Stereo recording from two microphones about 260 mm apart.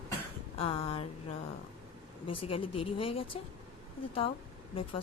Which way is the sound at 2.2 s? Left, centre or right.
Left.